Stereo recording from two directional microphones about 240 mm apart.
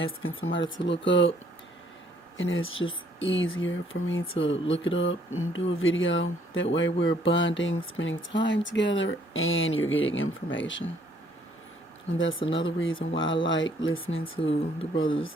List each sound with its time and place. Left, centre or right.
0.0 s speech: left
2.4 s speech: left
12.1 s speech: left
14.3 s speech: left